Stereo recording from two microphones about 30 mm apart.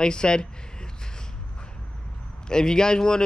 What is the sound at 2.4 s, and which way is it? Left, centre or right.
Speech, left.